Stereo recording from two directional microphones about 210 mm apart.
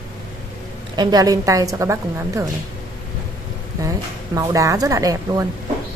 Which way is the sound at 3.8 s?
15° right (ahead or behind).